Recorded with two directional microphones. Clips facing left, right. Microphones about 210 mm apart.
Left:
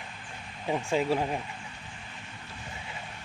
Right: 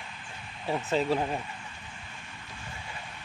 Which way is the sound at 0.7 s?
15° left (ahead or behind).